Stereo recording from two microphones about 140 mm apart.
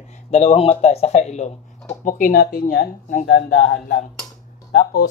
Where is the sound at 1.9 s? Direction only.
65° left (ahead or behind).